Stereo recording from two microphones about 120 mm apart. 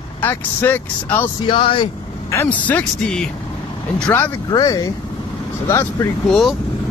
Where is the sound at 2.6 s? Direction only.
10° left (ahead or behind).